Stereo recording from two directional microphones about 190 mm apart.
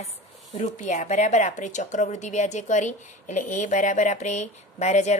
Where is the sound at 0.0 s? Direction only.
35° left (ahead or behind).